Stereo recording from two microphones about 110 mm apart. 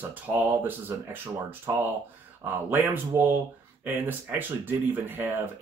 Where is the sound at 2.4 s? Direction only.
20° right (ahead or behind).